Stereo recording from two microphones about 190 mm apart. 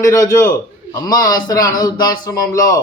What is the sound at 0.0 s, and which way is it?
A man's voice, 15° left (ahead or behind).